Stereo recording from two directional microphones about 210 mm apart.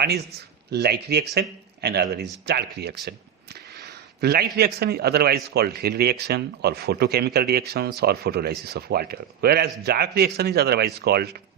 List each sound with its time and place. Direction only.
0.3 s a man's voice: 50° right (ahead or behind)
4.2 s a man's voice: 50° right (ahead or behind)